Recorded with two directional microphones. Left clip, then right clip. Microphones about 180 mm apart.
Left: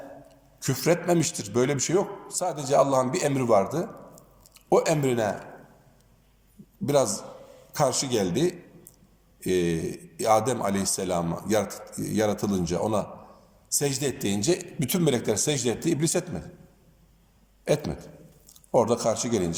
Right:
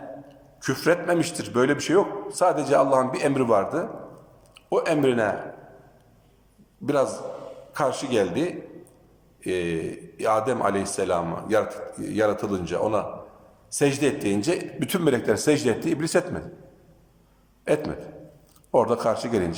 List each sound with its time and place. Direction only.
0.6 s a man's voice: 20° left (ahead or behind)
6.8 s a man's voice: 25° left (ahead or behind)
17.7 s a man's voice: 20° left (ahead or behind)